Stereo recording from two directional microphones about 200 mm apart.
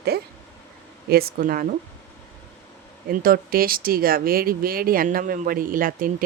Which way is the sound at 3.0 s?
45° right (ahead or behind).